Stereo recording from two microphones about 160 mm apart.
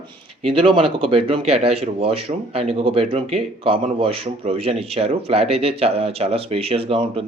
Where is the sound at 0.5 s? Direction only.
35° right (ahead or behind).